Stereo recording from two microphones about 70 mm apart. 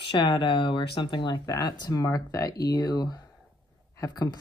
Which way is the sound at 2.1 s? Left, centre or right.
Left.